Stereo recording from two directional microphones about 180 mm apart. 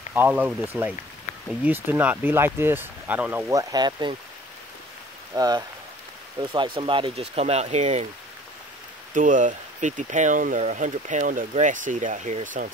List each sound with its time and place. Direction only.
0.1 s speech: 10° right (ahead or behind); by 4.2 s 25° right (ahead or behind)
5.3 s speech: 20° right (ahead or behind); by 8.1 s 40° right (ahead or behind)
9.1 s speech: 45° right (ahead or behind)